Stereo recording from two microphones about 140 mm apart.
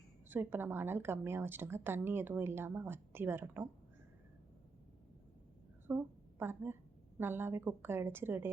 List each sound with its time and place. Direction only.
0.3 s a woman's voice: 15° right (ahead or behind)
5.9 s a woman's voice: 10° right (ahead or behind)